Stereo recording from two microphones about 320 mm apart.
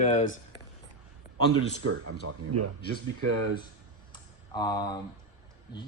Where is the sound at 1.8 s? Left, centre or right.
Right.